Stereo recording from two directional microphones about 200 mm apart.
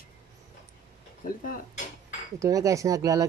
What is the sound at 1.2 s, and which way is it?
Speech, 45° left (ahead or behind).